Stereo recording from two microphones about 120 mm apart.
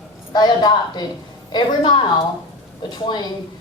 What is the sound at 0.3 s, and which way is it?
Speech, 35° left (ahead or behind).